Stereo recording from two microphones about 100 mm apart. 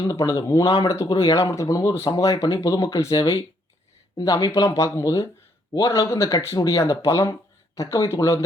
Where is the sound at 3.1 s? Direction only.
65° left (ahead or behind).